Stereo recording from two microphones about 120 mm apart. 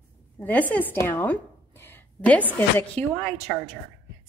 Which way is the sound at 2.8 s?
10° left (ahead or behind).